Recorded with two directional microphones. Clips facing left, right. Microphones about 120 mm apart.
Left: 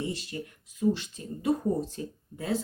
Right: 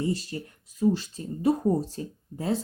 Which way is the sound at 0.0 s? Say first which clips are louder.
Right 5 dB; 40° right (ahead or behind).